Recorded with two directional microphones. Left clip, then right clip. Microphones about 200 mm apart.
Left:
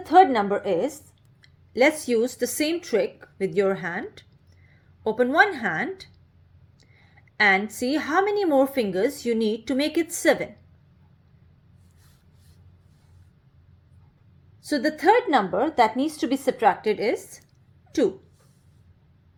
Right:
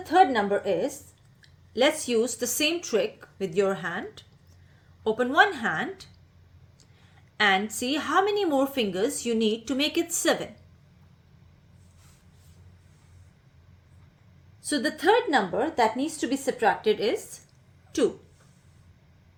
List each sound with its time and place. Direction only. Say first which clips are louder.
0.0 s a woman's voice: left 4 dB; 30° left (ahead or behind)
5.0 s a woman's voice: left 2 dB; 30° left (ahead or behind)
7.8 s a woman's voice: left 1 dB; 30° left (ahead or behind)
14.7 s a woman's voice: left 3 dB; 30° left (ahead or behind)